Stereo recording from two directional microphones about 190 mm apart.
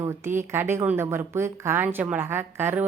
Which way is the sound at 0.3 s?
10° right (ahead or behind).